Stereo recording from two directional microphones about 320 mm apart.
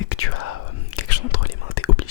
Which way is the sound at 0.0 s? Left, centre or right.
Left.